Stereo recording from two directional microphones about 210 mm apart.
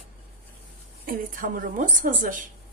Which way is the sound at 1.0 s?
40° right (ahead or behind).